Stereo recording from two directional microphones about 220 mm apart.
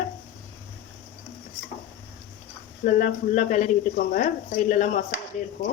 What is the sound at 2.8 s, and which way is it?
Speech, 35° left (ahead or behind).